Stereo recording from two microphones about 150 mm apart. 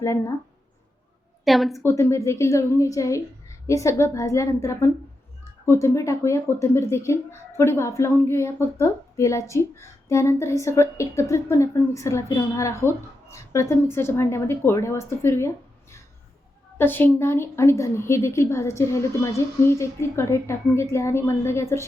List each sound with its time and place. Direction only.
0.0 s speech: 20° left (ahead or behind)
1.5 s a woman's voice: centre (ahead or behind)
1.8 s a woman's voice: 20° left (ahead or behind)